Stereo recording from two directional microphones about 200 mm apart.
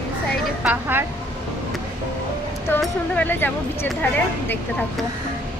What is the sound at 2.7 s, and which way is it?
Speech, 5° left (ahead or behind).